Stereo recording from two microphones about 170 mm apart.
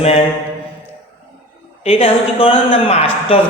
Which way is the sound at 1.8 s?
35° left (ahead or behind).